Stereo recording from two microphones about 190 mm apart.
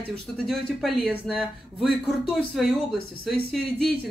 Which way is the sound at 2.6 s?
Centre (ahead or behind).